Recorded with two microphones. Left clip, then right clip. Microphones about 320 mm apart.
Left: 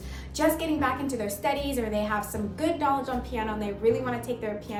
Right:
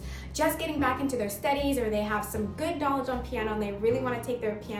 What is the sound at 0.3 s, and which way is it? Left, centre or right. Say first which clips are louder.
A woman's voice: left 2 dB; centre.